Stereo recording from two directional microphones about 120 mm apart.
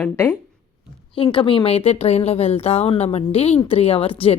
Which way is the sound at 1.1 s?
45° left (ahead or behind).